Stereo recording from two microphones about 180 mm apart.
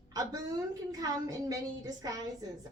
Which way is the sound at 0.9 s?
20° right (ahead or behind).